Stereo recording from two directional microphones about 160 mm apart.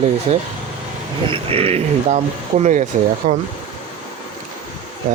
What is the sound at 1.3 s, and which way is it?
Speech, 35° right (ahead or behind).